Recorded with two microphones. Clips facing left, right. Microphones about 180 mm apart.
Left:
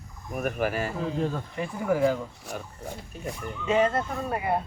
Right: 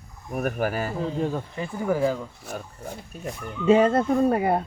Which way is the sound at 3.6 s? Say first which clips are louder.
Right 6 dB; 35° right (ahead or behind).